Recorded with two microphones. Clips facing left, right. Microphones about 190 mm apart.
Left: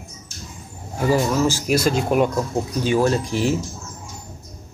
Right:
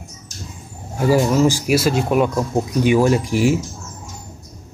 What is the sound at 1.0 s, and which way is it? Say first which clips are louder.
Speech: right 4 dB; 10° right (ahead or behind).